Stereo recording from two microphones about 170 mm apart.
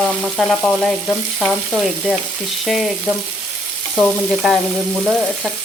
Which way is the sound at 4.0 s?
Centre (ahead or behind).